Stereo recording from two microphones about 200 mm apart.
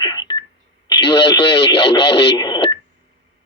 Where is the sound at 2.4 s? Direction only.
20° left (ahead or behind).